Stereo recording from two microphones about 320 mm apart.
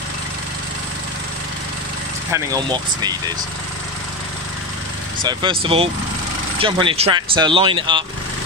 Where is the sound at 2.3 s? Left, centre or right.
Centre.